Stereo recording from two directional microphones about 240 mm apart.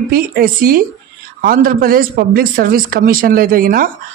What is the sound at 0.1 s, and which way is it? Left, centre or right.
Speech, right.